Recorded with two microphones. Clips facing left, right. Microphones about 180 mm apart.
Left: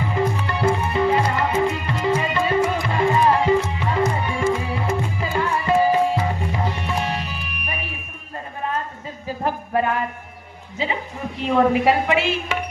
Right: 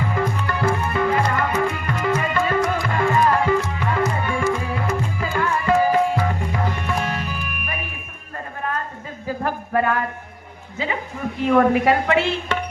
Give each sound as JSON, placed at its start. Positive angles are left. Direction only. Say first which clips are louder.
{"t": 0.1, "sound": "music", "louder": "left 1 dB", "side_deg": 20}
{"t": 9.4, "sound": "music", "louder": "even", "side_deg": 20}
{"t": 11.3, "sound": "a woman's voice", "louder": "right 1 dB", "side_deg": 20}